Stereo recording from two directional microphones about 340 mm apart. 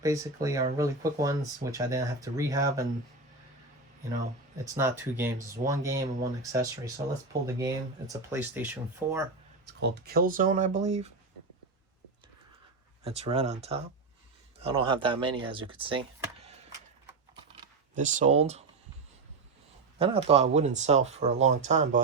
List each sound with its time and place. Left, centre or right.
0.0 s speech: centre
4.6 s speech: centre
7.4 s speech: centre
9.6 s speech: right
13.1 s speech: centre
17.5 s a sound: right
20.0 s speech: centre